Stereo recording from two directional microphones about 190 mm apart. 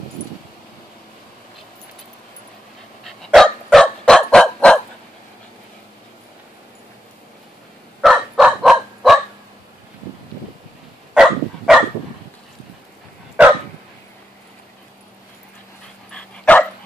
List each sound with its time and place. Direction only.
3.1 s dog: centre (ahead or behind)
8.0 s dog: centre (ahead or behind)
11.1 s dog: centre (ahead or behind)
16.1 s dog: 5° left (ahead or behind)